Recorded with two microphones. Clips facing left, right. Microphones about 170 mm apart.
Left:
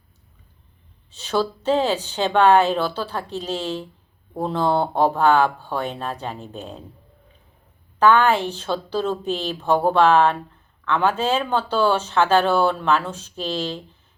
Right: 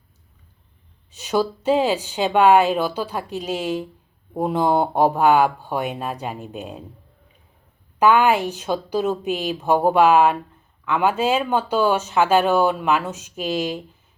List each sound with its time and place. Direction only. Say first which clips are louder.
1.1 s speech: right 1 dB; 10° right (ahead or behind)
7.9 s speech: even; 10° right (ahead or behind)